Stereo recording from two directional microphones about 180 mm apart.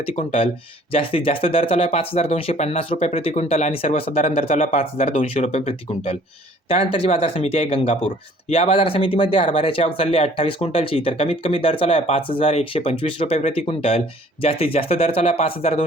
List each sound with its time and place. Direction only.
0.1 s speech: 35° left (ahead or behind)